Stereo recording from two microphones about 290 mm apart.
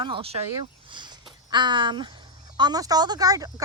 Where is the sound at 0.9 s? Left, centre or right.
Centre.